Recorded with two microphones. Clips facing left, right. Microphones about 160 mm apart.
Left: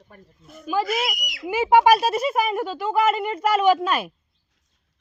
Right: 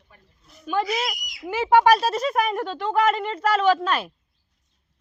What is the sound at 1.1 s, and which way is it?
Speech, 70° left (ahead or behind).